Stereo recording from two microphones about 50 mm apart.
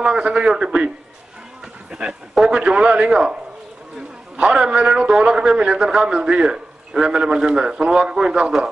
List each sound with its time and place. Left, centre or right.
0.0 s a man's voice: right
2.6 s a man's voice: right
4.7 s a man's voice: centre